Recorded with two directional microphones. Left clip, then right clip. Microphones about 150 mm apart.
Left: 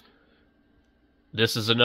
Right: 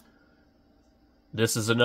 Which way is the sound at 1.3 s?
Centre (ahead or behind).